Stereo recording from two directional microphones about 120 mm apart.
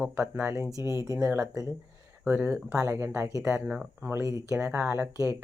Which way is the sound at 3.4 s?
10° right (ahead or behind).